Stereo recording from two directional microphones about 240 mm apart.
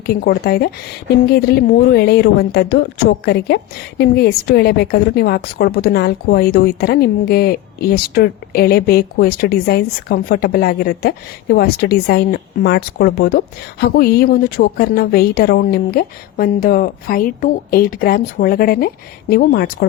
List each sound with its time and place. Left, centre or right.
0.0 s speech: left